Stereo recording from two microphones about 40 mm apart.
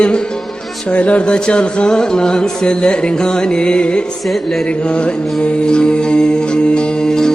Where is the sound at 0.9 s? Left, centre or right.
Left.